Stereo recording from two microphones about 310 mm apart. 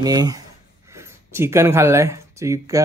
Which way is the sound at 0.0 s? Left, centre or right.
Centre.